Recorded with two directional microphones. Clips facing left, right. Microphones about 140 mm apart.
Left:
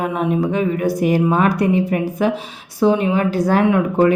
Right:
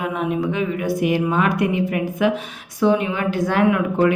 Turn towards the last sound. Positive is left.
turn(degrees=35)  # may be behind; listen again after turning